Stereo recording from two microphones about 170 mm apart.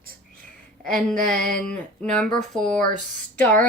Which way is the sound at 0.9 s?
5° left (ahead or behind).